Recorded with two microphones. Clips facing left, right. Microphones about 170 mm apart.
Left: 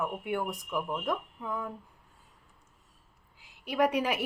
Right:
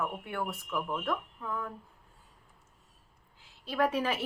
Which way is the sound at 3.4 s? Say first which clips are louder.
Left 2 dB; 15° left (ahead or behind).